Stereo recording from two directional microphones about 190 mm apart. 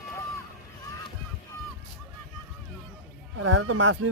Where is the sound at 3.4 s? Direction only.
90° right.